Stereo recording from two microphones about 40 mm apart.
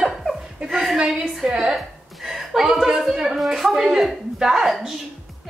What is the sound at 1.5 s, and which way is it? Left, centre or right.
Speech, right.